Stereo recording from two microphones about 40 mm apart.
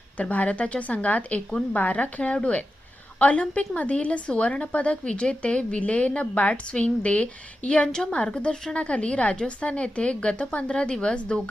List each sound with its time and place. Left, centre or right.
0.2 s a woman's voice: left